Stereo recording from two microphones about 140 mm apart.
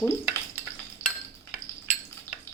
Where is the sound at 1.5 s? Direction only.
5° right (ahead or behind).